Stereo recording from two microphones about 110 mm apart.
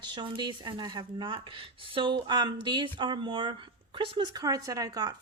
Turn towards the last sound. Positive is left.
turn(degrees=-35)  # may be behind; listen again after turning